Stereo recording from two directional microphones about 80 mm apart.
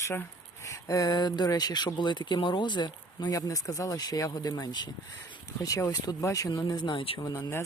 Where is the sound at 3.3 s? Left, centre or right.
Left.